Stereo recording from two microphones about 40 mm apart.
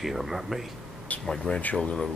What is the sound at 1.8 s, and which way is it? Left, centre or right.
Speech, left.